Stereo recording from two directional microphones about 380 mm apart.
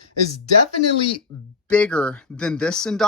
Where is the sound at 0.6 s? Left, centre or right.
Left.